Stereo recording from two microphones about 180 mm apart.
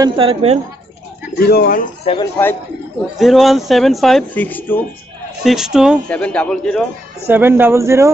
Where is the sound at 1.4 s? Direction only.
60° left (ahead or behind).